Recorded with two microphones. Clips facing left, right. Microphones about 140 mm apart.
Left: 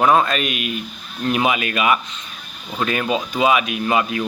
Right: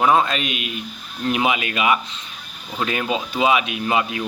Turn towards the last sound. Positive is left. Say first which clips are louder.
# left 2 dB
turn(degrees=-20)  # may be behind; listen again after turning